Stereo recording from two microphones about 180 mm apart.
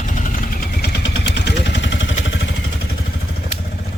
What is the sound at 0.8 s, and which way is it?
Vehicle, 75° left (ahead or behind).